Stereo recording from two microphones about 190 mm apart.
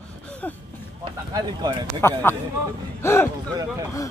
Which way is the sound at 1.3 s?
20° right (ahead or behind).